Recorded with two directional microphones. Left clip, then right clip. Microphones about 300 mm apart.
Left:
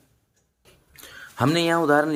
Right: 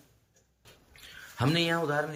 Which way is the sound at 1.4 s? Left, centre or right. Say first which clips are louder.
Left 7 dB; centre.